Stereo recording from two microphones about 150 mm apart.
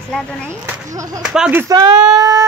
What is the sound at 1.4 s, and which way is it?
Speech, 10° right (ahead or behind).